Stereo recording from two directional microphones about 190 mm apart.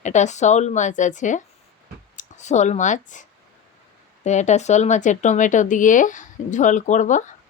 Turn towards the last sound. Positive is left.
turn(degrees=40)  # may be behind; listen again after turning